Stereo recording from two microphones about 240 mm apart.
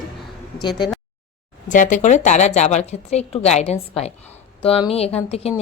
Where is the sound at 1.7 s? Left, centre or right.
Left.